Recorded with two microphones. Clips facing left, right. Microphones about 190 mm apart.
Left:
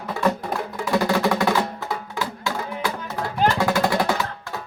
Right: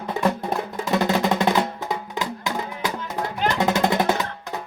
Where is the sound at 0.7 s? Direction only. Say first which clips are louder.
Left 1 dB; 20° right (ahead or behind).